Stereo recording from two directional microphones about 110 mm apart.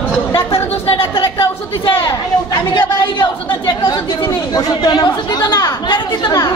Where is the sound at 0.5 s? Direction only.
55° left (ahead or behind).